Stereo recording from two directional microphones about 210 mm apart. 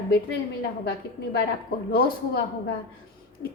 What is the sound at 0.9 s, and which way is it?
A woman's voice, 50° left (ahead or behind).